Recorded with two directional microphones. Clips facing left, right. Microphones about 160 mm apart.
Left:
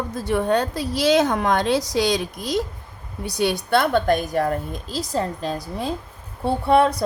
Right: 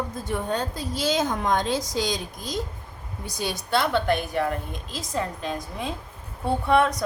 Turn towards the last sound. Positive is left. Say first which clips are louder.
# left 3 dB
turn(degrees=30)  # may be behind; listen again after turning